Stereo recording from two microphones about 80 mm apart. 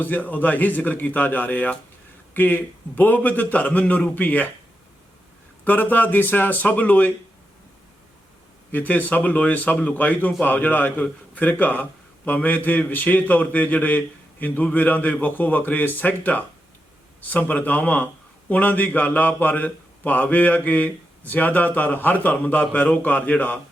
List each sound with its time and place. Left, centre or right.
0.0 s speech: left
5.6 s speech: left
8.7 s speech: left